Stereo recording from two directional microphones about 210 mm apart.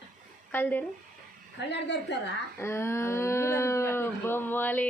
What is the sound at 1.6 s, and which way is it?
Speech, 55° left (ahead or behind).